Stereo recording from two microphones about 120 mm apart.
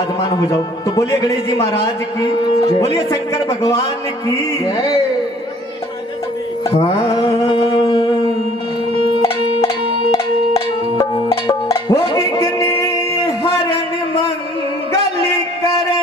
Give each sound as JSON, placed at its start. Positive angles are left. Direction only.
{"t": 0.3, "sound": "speech", "side_deg": 35}
{"t": 4.4, "sound": "music", "side_deg": 30}
{"t": 6.7, "sound": "music", "side_deg": 50}
{"t": 10.1, "sound": "music", "side_deg": 30}